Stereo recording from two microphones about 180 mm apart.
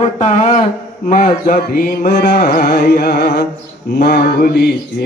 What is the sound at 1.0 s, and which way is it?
Carnatic music, 45° left (ahead or behind).